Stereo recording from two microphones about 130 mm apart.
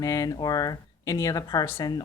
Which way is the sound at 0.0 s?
25° left (ahead or behind).